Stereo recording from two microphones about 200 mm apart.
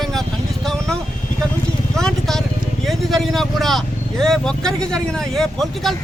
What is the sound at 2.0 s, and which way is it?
Speech, centre (ahead or behind).